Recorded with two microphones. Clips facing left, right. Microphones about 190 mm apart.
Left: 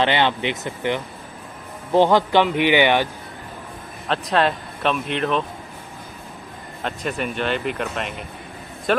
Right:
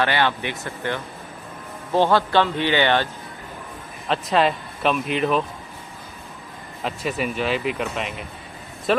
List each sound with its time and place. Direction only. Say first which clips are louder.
0.0 s a man's voice: left 2 dB; 20° left (ahead or behind)
4.1 s speech: even; centre (ahead or behind)
6.8 s speech: even; 5° right (ahead or behind)